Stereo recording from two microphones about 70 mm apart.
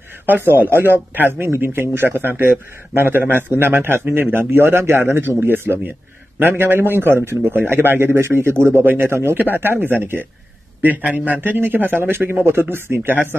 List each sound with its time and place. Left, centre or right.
0.3 s a man's voice: right